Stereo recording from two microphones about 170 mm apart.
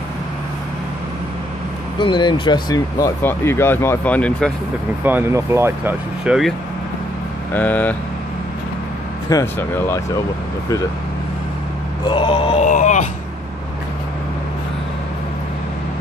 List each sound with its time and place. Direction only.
2.0 s speech: 30° left (ahead or behind); by 4.5 s 10° left (ahead or behind)
5.0 s speech: 15° right (ahead or behind)
7.5 s speech: 10° left (ahead or behind)
9.3 s speech: 15° left (ahead or behind)
12.1 s mantra: 30° left (ahead or behind)
12.6 s speech: 45° left (ahead or behind)